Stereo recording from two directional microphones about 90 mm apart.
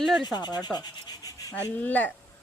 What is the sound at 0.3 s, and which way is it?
Rub, 50° left (ahead or behind).